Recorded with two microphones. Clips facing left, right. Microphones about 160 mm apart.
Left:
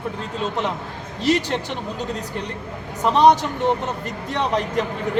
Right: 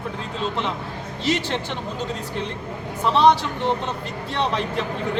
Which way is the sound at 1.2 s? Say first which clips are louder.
Left 3 dB; 40° left (ahead or behind).